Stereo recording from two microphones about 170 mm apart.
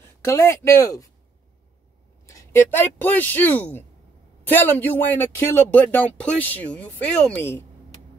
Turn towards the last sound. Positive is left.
turn(degrees=10)  # may be behind; listen again after turning